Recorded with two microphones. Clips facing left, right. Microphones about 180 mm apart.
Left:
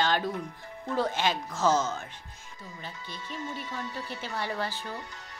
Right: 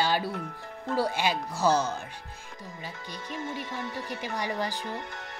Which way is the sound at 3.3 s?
55° right (ahead or behind).